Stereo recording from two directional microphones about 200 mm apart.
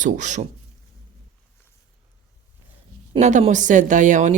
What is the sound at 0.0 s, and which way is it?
Speech, 35° right (ahead or behind).